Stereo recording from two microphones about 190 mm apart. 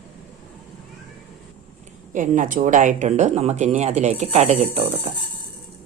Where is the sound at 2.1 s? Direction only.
45° right (ahead or behind).